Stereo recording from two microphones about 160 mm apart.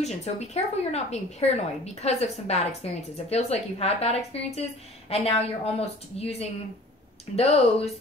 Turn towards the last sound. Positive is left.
turn(degrees=40)  # may be behind; listen again after turning